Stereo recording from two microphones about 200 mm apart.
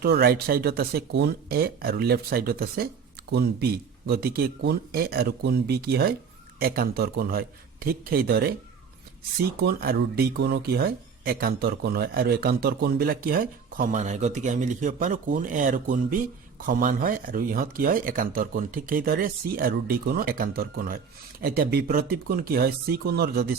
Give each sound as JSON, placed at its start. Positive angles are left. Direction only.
{"t": 0.0, "sound": "speech", "side_deg": -50}
{"t": 9.6, "sound": "speech", "side_deg": -50}